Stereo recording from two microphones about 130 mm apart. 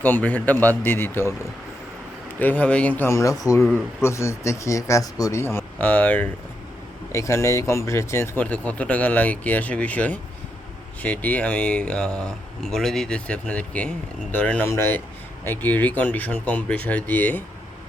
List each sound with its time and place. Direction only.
0.0 s speech: 15° left (ahead or behind)
2.4 s speech: 10° left (ahead or behind)